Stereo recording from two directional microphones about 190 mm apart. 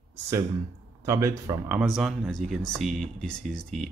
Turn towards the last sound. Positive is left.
turn(degrees=5)  # may be behind; listen again after turning